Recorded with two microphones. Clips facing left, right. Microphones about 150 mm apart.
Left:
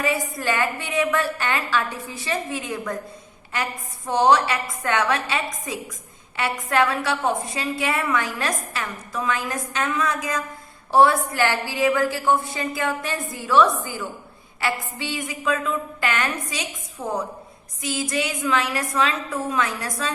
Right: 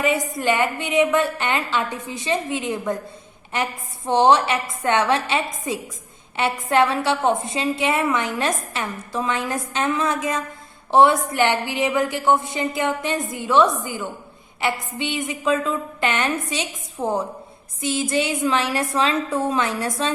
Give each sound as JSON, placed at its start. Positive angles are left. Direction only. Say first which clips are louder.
{"t": 0.0, "sound": "a woman's voice", "louder": "right 3 dB", "side_deg": -20}